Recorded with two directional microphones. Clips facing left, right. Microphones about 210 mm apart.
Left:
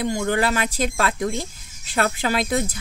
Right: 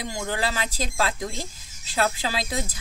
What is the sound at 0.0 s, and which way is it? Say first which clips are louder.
Speech: left 7 dB; 60° left (ahead or behind).